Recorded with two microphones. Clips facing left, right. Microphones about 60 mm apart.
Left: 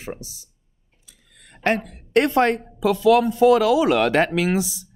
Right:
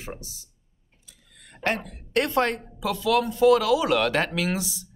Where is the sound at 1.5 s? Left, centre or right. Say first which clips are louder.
Left 5 dB; left.